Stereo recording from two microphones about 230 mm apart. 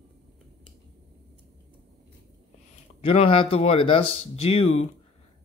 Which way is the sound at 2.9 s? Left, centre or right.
Left.